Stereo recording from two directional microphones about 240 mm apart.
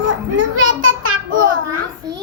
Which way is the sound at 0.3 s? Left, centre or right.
Right.